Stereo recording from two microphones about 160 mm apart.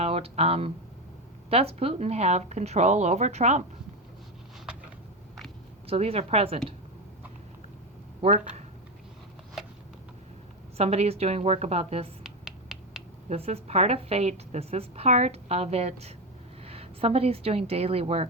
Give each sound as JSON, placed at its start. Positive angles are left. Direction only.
{"t": 0.0, "sound": "speech", "side_deg": -40}
{"t": 5.9, "sound": "a woman's voice", "side_deg": -40}
{"t": 8.2, "sound": "speech", "side_deg": -45}
{"t": 10.8, "sound": "a woman's voice", "side_deg": -40}
{"t": 12.2, "sound": "finger snapping", "side_deg": -5}
{"t": 13.2, "sound": "a woman's voice", "side_deg": -40}